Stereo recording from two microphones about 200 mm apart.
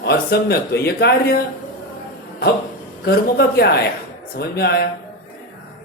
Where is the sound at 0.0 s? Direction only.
55° left (ahead or behind).